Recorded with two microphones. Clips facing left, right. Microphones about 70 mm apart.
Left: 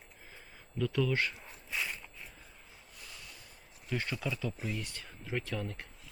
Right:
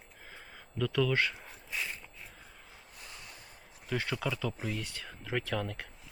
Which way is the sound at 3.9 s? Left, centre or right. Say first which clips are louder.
Right 2 dB; right.